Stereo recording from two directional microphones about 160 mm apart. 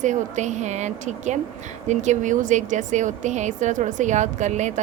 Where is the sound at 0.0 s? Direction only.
50° right (ahead or behind).